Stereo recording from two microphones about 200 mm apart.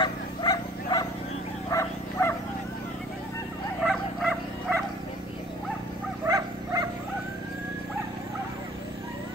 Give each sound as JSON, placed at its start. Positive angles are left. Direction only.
{"t": 0.0, "sound": "bow-wow", "side_deg": 20}
{"t": 3.8, "sound": "bow-wow", "side_deg": 0}
{"t": 6.2, "sound": "wild animals", "side_deg": -20}